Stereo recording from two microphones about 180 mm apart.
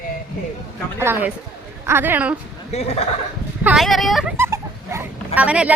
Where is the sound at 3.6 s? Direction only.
Centre (ahead or behind).